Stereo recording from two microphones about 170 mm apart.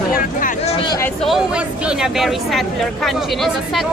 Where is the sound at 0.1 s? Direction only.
55° left (ahead or behind).